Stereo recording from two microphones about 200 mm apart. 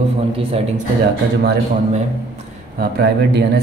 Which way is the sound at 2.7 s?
55° right (ahead or behind).